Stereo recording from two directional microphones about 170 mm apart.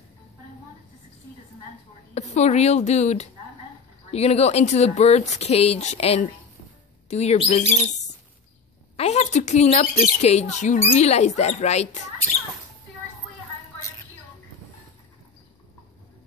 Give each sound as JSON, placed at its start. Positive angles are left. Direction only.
{"t": 2.1, "sound": "a woman's voice", "side_deg": 40}
{"t": 8.9, "sound": "a woman's voice", "side_deg": 40}